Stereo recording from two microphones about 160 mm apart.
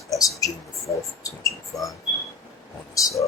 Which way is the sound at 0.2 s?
20° left (ahead or behind).